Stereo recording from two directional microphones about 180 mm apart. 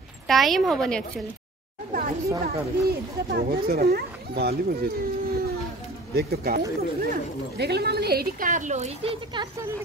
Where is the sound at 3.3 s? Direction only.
60° right (ahead or behind).